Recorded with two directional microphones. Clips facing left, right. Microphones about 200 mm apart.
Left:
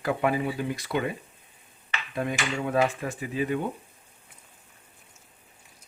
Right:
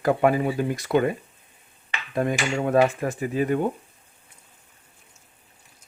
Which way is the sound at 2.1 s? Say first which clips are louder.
Right 6 dB; 45° right (ahead or behind).